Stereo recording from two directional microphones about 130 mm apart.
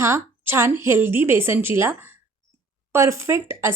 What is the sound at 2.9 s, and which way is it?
Speech, 20° right (ahead or behind).